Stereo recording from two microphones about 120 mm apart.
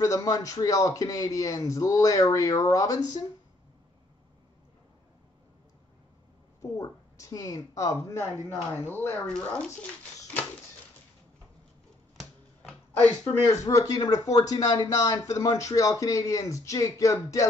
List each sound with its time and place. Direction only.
0.0 s a man's voice: 25° left (ahead or behind)
6.6 s a man's voice: 30° left (ahead or behind); by 9.7 s 5° left (ahead or behind)
13.7 s a man's voice: 30° left (ahead or behind)